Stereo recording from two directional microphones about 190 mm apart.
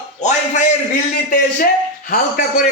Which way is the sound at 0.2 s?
40° left (ahead or behind).